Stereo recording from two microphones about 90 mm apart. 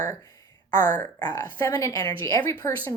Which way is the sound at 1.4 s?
30° left (ahead or behind).